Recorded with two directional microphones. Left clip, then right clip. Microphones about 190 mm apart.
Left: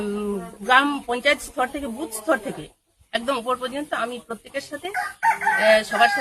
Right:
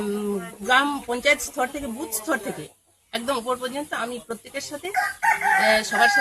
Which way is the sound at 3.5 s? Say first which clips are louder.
Left 2 dB; 25° left (ahead or behind).